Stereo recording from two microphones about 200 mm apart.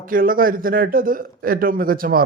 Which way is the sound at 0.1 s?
45° right (ahead or behind).